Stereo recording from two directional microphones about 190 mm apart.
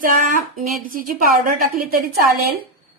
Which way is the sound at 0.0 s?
45° right (ahead or behind).